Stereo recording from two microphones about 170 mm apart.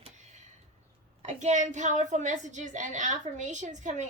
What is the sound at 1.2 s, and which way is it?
A woman's voice, 45° right (ahead or behind).